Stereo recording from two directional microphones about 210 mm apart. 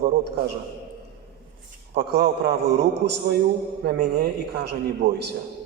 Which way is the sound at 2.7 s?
55° right (ahead or behind).